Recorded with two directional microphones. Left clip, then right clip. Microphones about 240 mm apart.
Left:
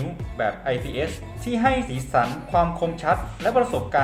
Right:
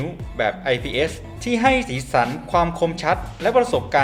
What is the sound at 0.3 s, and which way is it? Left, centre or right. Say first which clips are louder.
Speech: right 3 dB; right.